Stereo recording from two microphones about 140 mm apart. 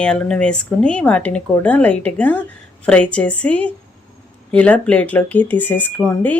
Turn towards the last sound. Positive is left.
turn(degrees=10)  # may be behind; listen again after turning